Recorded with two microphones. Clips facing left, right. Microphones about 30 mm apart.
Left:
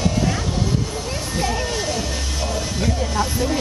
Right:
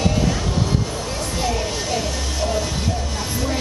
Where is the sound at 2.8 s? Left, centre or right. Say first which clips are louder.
Left 4 dB; centre.